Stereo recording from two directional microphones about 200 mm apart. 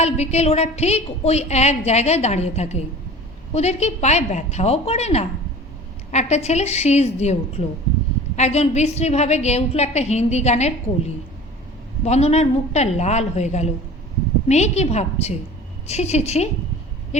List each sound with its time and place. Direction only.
0.0 s a woman's voice: 35° left (ahead or behind)
12.0 s a woman's voice: 35° left (ahead or behind)